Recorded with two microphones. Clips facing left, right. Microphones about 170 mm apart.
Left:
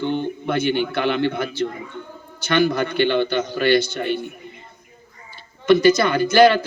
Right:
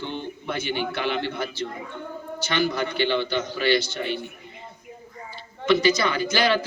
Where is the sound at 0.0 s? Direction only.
55° left (ahead or behind).